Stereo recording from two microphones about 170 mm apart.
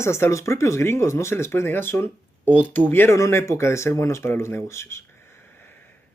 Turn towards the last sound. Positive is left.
turn(degrees=10)  # may be behind; listen again after turning